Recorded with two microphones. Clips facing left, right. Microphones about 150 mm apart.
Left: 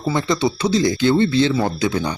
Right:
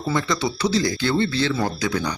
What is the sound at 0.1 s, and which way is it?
Speech, 25° left (ahead or behind).